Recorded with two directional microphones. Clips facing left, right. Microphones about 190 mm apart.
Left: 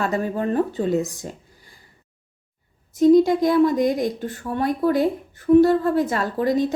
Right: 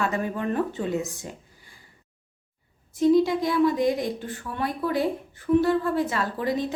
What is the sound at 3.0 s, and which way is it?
Speech, 45° left (ahead or behind).